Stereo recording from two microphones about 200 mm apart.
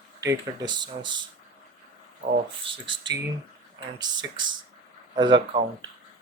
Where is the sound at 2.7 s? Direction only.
25° right (ahead or behind).